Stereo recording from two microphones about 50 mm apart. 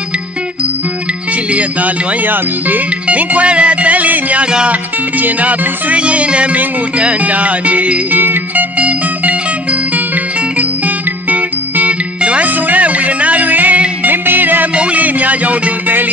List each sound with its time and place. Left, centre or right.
1.5 s music: right
3.1 s music: right
8.2 s music: right
8.7 s music: right
11.2 s music: right